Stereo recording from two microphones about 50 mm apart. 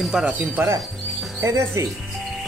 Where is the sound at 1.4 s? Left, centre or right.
Right.